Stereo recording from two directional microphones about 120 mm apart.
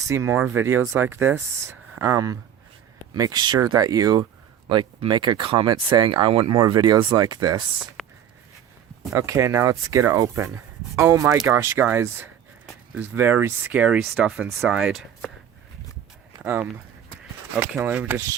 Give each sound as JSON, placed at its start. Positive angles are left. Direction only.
{"t": 0.1, "sound": "speech", "side_deg": -25}
{"t": 8.0, "sound": "a sound", "side_deg": 5}
{"t": 9.1, "sound": "speech", "side_deg": -25}
{"t": 16.4, "sound": "speech", "side_deg": -10}
{"t": 17.8, "sound": "speech", "side_deg": -10}